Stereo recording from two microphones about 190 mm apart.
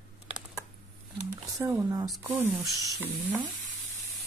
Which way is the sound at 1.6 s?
15° right (ahead or behind).